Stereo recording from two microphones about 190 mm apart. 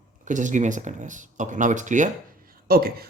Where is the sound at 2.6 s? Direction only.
50° right (ahead or behind).